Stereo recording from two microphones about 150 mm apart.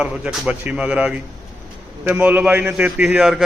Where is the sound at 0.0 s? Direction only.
5° right (ahead or behind).